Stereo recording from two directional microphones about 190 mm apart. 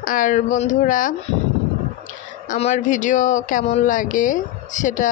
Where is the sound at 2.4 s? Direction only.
40° left (ahead or behind).